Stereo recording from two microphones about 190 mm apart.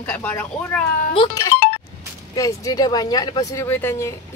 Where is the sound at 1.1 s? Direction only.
20° left (ahead or behind).